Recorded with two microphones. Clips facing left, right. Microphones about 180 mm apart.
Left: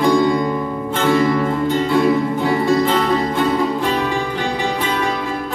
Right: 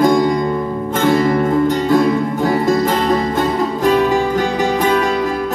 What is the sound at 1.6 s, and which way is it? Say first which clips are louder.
Music: right 2 dB; 40° right (ahead or behind).